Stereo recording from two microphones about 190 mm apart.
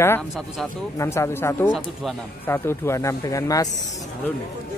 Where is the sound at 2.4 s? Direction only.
10° left (ahead or behind).